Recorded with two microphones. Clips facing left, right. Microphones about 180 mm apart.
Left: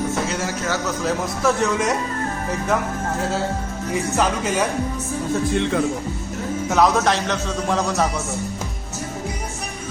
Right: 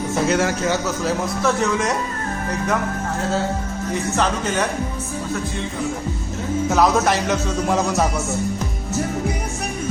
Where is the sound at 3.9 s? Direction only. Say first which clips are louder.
Left 1 dB; 5° left (ahead or behind).